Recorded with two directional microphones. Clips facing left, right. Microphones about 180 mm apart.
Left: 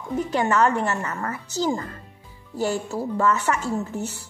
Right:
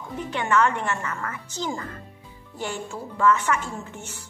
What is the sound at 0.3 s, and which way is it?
Speech, 40° left (ahead or behind).